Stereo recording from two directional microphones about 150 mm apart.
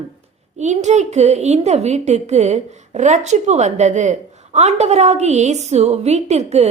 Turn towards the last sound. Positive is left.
turn(degrees=-45)  # may be behind; listen again after turning